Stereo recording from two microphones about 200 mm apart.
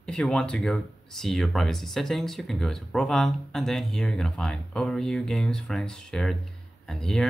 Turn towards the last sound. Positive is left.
turn(degrees=0)  # may be behind; listen again after turning